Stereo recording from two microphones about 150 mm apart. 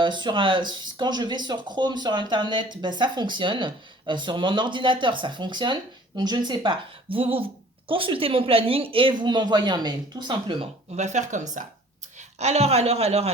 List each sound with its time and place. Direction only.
0.0 s speech: 30° right (ahead or behind)
10.9 s speech: 50° right (ahead or behind)